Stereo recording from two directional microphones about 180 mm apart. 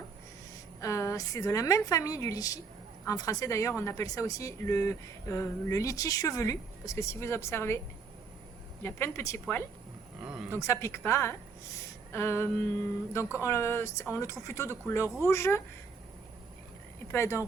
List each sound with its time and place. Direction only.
0.8 s speech: 15° left (ahead or behind)
8.8 s speech: 15° left (ahead or behind)
10.2 s a sound: 5° right (ahead or behind)
10.6 s speech: 15° left (ahead or behind)
17.1 s speech: 15° left (ahead or behind)